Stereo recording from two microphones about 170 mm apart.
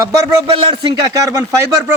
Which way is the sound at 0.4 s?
30° right (ahead or behind).